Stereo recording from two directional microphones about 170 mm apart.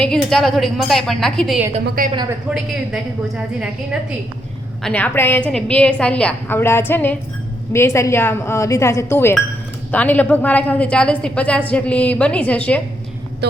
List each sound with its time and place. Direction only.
0.0 s a woman's voice: 5° left (ahead or behind)
2.0 s a woman's voice: 60° right (ahead or behind)
2.9 s a woman's voice: 5° right (ahead or behind)
4.8 s a woman's voice: 5° left (ahead or behind)
13.4 s speech: 75° right (ahead or behind)